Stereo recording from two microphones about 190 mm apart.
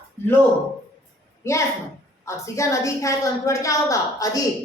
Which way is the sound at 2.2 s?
15° left (ahead or behind).